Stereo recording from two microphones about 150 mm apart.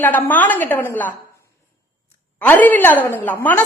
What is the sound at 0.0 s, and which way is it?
A woman's voice, 10° left (ahead or behind).